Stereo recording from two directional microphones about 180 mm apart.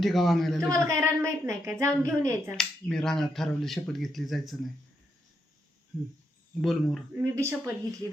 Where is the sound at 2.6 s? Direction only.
5° left (ahead or behind).